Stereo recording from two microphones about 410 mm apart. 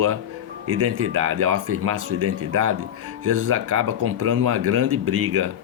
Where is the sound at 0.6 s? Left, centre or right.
Right.